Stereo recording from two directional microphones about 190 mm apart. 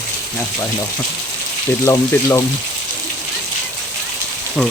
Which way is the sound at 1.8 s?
15° left (ahead or behind).